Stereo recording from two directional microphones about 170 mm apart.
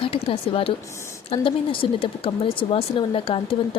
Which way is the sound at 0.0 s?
30° left (ahead or behind).